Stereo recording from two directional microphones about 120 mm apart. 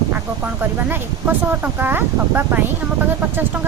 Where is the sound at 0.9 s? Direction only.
15° right (ahead or behind).